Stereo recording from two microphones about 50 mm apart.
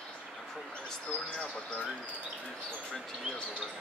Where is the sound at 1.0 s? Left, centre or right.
Centre.